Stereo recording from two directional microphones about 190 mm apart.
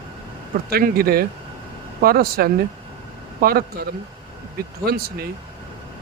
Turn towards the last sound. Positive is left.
turn(degrees=-55)  # may be behind; listen again after turning